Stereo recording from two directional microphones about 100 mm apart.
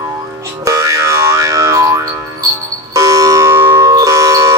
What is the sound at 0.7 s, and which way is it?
Boing, 30° right (ahead or behind).